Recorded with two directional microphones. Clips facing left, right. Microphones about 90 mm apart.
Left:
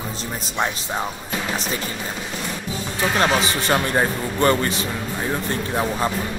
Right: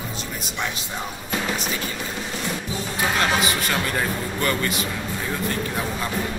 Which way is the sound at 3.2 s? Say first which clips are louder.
Left 4 dB; 30° left (ahead or behind).